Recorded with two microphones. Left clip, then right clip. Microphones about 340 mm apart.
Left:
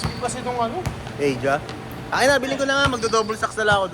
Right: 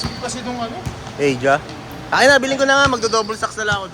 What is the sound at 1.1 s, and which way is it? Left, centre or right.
A man's voice, right.